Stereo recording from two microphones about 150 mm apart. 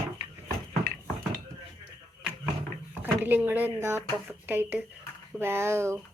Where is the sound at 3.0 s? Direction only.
15° right (ahead or behind).